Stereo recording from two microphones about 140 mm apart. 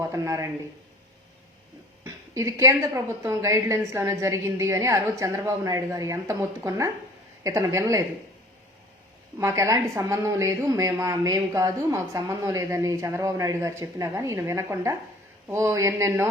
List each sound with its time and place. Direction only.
0.0 s speech: 25° right (ahead or behind)
2.0 s speech: 20° right (ahead or behind)
9.4 s speech: 20° right (ahead or behind)